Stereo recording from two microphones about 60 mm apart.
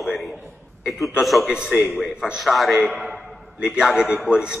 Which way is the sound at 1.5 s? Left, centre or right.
Centre.